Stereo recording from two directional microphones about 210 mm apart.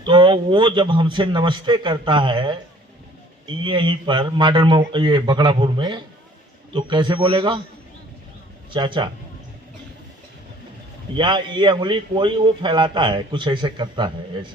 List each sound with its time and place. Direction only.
0.0 s a man's voice: 20° right (ahead or behind)
8.7 s a man's voice: 20° right (ahead or behind)
11.2 s a man's voice: 20° right (ahead or behind)